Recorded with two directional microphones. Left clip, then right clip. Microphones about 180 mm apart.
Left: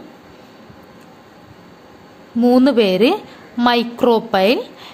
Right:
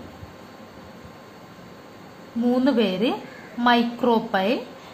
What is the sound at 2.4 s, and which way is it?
A woman's voice, 60° left (ahead or behind).